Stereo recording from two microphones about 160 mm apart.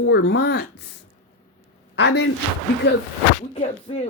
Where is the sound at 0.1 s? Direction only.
90° left.